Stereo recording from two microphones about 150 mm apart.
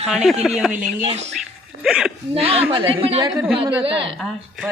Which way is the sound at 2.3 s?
40° right (ahead or behind).